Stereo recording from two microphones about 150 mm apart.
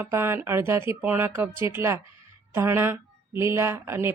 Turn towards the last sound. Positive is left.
turn(degrees=-15)  # may be behind; listen again after turning